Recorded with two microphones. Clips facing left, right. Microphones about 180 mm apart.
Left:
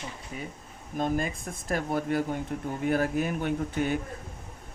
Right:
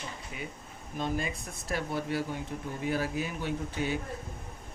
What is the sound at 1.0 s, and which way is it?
Speech, 50° left (ahead or behind).